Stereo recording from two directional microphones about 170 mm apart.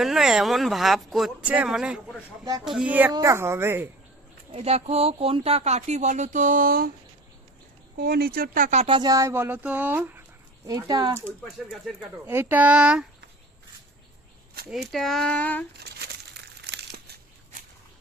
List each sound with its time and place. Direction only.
0.0 s speech: centre (ahead or behind)
4.5 s speech: 35° right (ahead or behind); by 6.9 s 60° right (ahead or behind)
7.9 s speech: 65° right (ahead or behind); by 9.0 s 40° right (ahead or behind)
9.0 s speech: 20° right (ahead or behind)
11.1 s speech: 5° right (ahead or behind)
14.7 s speech: centre (ahead or behind)
15.8 s crumpling: 70° right (ahead or behind)